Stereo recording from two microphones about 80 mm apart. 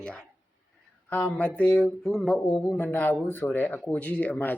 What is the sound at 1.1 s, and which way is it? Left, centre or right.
Speech, left.